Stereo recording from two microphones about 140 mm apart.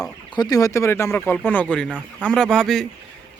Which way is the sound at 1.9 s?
10° right (ahead or behind).